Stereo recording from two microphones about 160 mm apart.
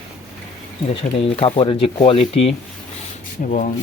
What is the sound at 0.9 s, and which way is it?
Speech, 35° left (ahead or behind).